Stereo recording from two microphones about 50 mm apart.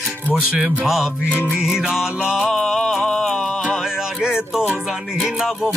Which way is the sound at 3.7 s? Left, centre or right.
Centre.